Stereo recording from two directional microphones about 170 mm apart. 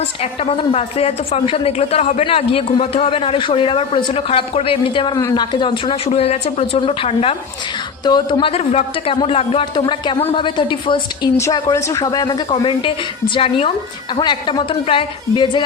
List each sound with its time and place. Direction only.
0.0 s a woman's voice: 35° left (ahead or behind)
11.3 s speech: 15° left (ahead or behind)